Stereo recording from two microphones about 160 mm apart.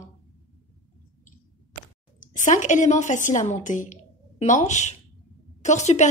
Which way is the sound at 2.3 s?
50° left (ahead or behind).